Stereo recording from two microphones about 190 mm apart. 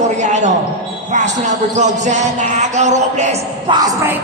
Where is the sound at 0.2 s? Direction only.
40° right (ahead or behind).